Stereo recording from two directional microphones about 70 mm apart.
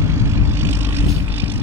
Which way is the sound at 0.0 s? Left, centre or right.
Right.